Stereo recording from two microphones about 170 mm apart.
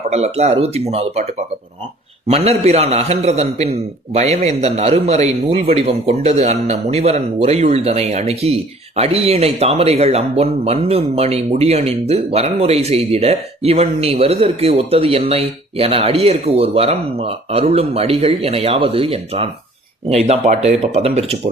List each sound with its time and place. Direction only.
0.1 s speech: 40° right (ahead or behind)